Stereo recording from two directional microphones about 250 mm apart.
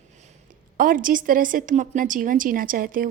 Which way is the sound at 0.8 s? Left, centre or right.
Right.